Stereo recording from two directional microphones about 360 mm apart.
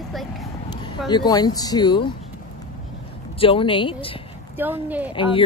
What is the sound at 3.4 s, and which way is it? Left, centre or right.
Speech, centre.